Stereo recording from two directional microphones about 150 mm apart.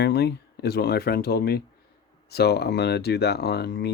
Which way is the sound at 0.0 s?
90° left.